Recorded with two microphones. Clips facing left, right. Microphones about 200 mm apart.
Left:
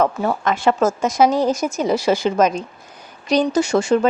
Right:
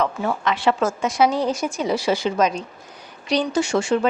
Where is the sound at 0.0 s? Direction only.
40° left (ahead or behind).